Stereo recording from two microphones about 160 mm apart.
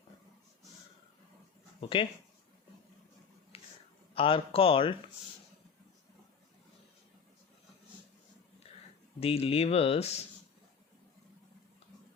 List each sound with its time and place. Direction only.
1.8 s speech: 30° left (ahead or behind)
3.5 s whispering: 40° left (ahead or behind)
4.1 s speech: 35° left (ahead or behind)
9.2 s speech: 35° left (ahead or behind)